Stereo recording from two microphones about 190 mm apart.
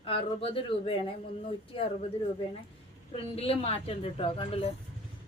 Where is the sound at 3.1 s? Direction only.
30° left (ahead or behind).